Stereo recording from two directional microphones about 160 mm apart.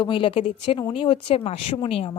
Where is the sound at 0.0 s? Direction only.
30° left (ahead or behind).